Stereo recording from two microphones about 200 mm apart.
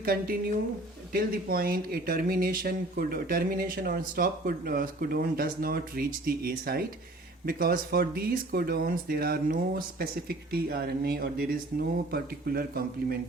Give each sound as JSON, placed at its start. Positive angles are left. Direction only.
{"t": 0.0, "sound": "speech", "side_deg": -45}